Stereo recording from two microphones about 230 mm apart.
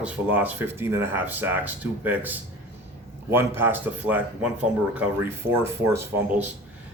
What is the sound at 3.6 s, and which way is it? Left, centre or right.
Speech, centre.